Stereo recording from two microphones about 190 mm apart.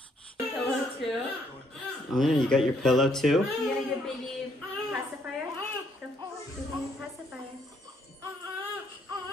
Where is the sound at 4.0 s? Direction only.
Centre (ahead or behind).